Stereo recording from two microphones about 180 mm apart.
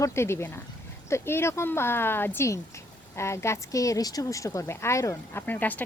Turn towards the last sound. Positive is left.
turn(degrees=10)  # may be behind; listen again after turning